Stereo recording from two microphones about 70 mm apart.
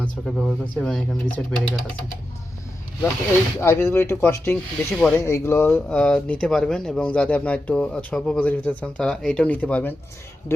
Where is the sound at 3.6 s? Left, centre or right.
Left.